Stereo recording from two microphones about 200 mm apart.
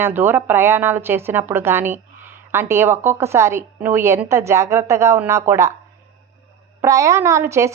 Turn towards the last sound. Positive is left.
turn(degrees=-15)  # may be behind; listen again after turning